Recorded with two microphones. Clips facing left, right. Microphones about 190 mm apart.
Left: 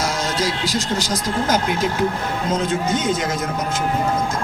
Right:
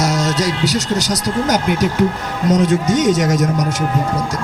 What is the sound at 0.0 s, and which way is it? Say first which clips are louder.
A man's voice: right 5 dB; 75° right (ahead or behind).